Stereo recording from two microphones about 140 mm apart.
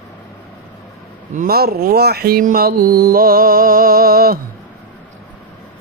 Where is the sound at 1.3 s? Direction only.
90° right.